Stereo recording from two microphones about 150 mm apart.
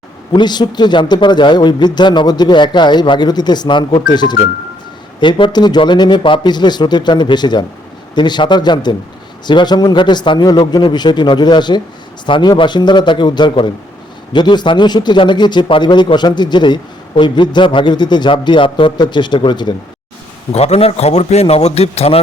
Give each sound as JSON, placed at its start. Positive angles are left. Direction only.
{"t": 0.3, "sound": "a man's voice", "side_deg": 30}
{"t": 20.5, "sound": "a man's voice", "side_deg": 45}